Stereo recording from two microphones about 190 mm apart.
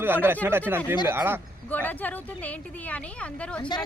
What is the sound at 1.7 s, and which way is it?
A woman's voice, 10° left (ahead or behind).